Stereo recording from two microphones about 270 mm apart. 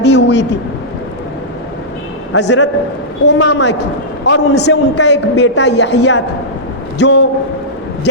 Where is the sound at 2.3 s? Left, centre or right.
Left.